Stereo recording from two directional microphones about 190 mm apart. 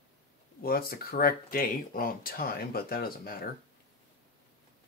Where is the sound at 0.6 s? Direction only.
55° left (ahead or behind).